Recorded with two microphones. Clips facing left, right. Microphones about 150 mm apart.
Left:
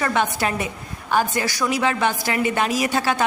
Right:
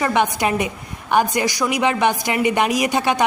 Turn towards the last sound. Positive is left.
turn(degrees=-15)  # may be behind; listen again after turning